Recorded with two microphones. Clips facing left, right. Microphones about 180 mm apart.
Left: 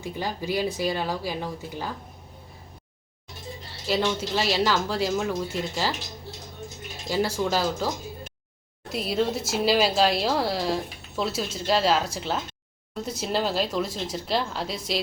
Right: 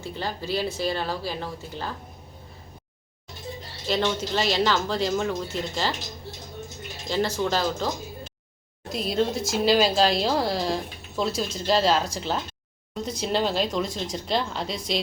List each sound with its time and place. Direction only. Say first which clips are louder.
0.0 s speech: left 1 dB; 15° left (ahead or behind)
3.8 s speech: even; 5° left (ahead or behind)
7.1 s speech: even; 10° left (ahead or behind)
8.9 s speech: right 1 dB; 5° left (ahead or behind)